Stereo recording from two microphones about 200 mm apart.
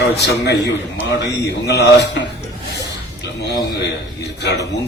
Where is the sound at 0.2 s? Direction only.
55° left (ahead or behind).